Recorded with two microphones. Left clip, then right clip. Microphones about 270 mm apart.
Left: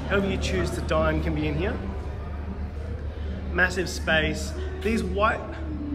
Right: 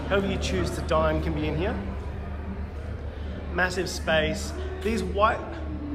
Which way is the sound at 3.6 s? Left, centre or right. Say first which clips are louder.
Left 2 dB; centre.